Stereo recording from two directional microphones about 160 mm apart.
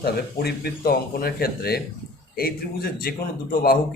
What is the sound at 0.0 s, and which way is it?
A man's voice, 80° left.